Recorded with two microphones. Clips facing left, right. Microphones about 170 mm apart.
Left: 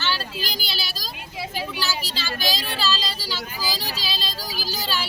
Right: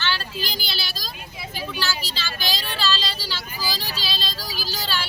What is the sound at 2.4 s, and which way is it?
Child singing, 40° left (ahead or behind).